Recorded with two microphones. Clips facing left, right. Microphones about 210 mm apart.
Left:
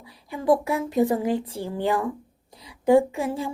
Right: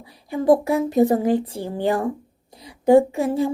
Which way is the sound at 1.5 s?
15° right (ahead or behind).